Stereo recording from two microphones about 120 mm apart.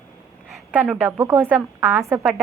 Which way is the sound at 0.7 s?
15° right (ahead or behind).